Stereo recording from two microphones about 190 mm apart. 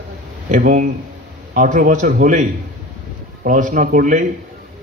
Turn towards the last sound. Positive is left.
turn(degrees=-45)  # may be behind; listen again after turning